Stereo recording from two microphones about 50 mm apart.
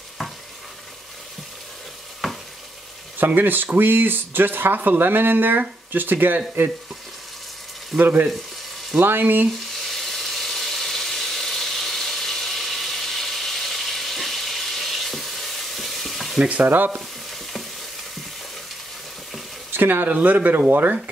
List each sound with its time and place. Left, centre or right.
0.2 s stir: centre
3.2 s speech: right
8.0 s speech: right
9.8 s a sound: centre
16.3 s sizzle: right
16.6 s speech: right
19.7 s speech: right